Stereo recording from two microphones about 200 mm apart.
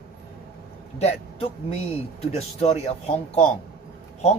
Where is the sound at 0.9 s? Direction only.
30° left (ahead or behind).